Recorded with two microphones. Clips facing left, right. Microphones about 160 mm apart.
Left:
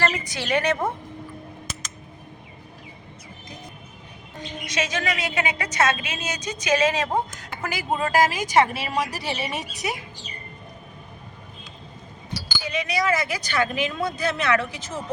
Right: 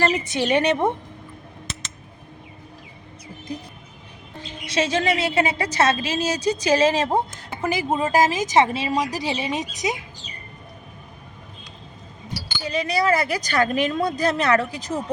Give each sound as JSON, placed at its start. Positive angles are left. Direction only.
{"t": 0.0, "sound": "a woman's voice", "side_deg": -25}
{"t": 4.4, "sound": "a woman's voice", "side_deg": -30}
{"t": 12.5, "sound": "a woman's voice", "side_deg": -35}